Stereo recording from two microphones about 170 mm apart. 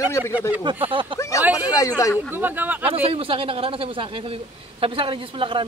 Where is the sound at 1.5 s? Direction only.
20° left (ahead or behind).